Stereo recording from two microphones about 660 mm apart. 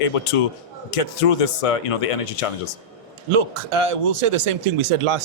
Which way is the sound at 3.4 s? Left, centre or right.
Right.